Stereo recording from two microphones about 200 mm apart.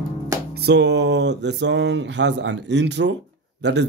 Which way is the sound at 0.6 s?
60° right (ahead or behind).